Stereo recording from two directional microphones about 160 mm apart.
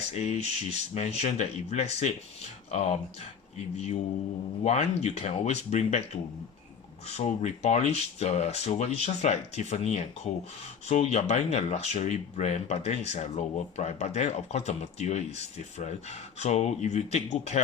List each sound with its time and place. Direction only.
0.0 s speech: 40° left (ahead or behind)
7.1 s speech: 40° left (ahead or behind)